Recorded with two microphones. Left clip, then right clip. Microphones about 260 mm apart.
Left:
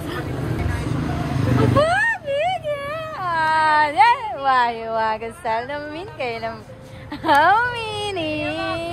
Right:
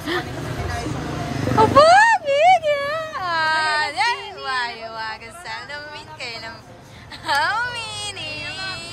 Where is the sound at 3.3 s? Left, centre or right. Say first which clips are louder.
Left 3 dB; centre.